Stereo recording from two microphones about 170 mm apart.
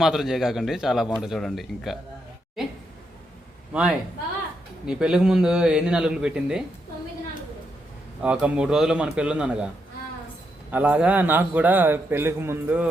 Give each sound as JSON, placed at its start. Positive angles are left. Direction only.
{"t": 0.0, "sound": "speech", "side_deg": 0}
{"t": 2.6, "sound": "a sound", "side_deg": 0}
{"t": 3.7, "sound": "a man's voice", "side_deg": -5}
{"t": 8.2, "sound": "speech", "side_deg": -5}
{"t": 10.7, "sound": "a man's voice", "side_deg": -10}